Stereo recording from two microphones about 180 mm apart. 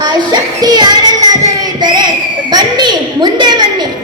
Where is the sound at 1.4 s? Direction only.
20° right (ahead or behind).